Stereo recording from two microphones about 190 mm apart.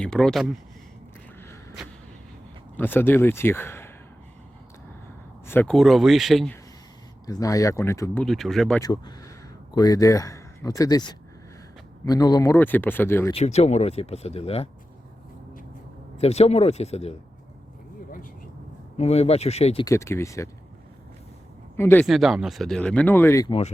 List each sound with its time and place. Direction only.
0.0 s speech: 5° left (ahead or behind)
2.7 s speech: 10° left (ahead or behind)
5.5 s speech: 10° left (ahead or behind)
5.7 s speech: centre (ahead or behind)
7.3 s speech: 20° left (ahead or behind)
8.2 s speech: centre (ahead or behind)
8.8 s speech: 20° left (ahead or behind)
13.3 s speech: 35° left (ahead or behind)
16.1 s speech: 35° left (ahead or behind)
18.9 s speech: 35° left (ahead or behind)
19.8 s speech: 15° left (ahead or behind)
21.8 s speech: 10° left (ahead or behind)
22.0 s speech: centre (ahead or behind); by 23.5 s 15° left (ahead or behind)
23.5 s speech: 35° left (ahead or behind)